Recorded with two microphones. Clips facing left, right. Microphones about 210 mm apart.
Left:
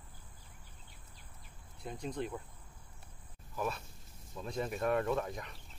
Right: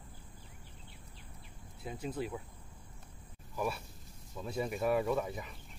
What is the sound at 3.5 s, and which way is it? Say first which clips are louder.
Speech: right 1 dB; 10° right (ahead or behind).